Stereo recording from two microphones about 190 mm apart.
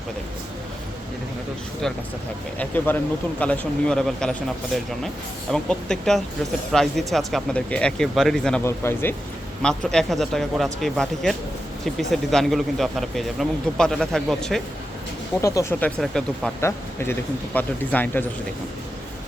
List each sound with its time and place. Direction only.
2.6 s speech: 10° left (ahead or behind)
8.6 s speech: 15° left (ahead or behind)
15.4 s speech: 15° left (ahead or behind)
16.0 s speech: 5° left (ahead or behind)